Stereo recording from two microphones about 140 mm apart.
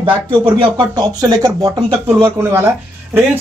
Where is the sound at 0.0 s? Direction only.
35° right (ahead or behind); by 2.7 s 20° right (ahead or behind).